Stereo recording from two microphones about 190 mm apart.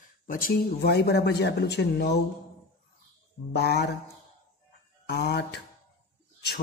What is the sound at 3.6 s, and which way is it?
Speech, 60° left (ahead or behind).